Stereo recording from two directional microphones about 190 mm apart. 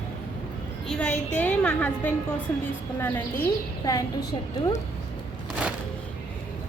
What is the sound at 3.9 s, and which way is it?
Speech, 20° left (ahead or behind).